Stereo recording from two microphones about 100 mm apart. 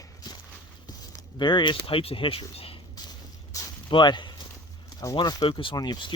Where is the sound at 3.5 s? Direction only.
35° left (ahead or behind).